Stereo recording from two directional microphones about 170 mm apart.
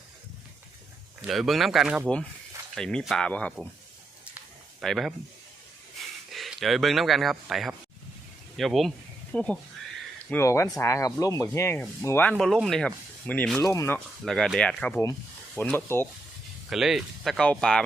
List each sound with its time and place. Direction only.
1.3 s speech: centre (ahead or behind)
4.8 s speech: centre (ahead or behind)
12.4 s speech: centre (ahead or behind)
13.6 s speech: 20° left (ahead or behind)
14.3 s speech: centre (ahead or behind)
16.6 s speech: centre (ahead or behind)